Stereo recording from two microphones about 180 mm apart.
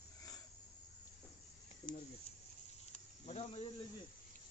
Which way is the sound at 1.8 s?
25° left (ahead or behind).